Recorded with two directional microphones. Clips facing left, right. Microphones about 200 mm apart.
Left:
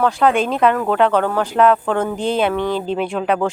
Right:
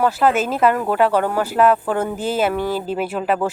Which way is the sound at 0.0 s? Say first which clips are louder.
Left 1 dB; 5° right (ahead or behind).